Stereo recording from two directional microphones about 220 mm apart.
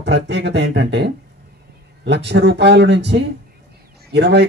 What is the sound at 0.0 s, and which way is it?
Speech, 50° right (ahead or behind).